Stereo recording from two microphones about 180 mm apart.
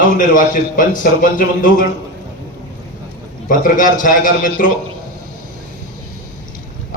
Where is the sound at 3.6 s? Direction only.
45° left (ahead or behind).